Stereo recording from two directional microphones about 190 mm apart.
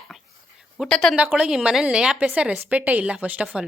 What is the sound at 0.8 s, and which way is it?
A woman's voice, centre (ahead or behind).